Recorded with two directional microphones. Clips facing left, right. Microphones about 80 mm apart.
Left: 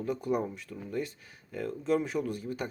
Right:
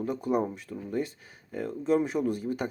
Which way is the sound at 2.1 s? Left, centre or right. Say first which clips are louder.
Right 4 dB; right.